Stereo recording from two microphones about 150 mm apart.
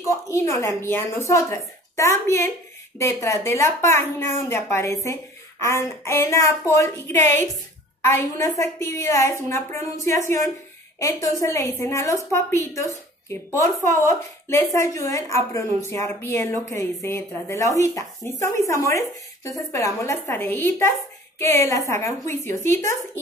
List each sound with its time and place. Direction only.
0.0 s a woman's voice: 20° left (ahead or behind)
11.0 s a woman's voice: 20° left (ahead or behind)